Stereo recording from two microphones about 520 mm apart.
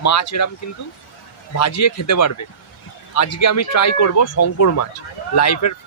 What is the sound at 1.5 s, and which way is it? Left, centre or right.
Speech, left.